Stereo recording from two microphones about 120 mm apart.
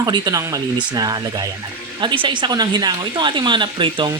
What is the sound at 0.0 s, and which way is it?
Speech, 30° right (ahead or behind).